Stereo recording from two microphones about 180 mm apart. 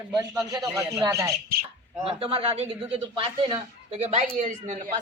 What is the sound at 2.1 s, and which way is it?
Speech, 30° right (ahead or behind).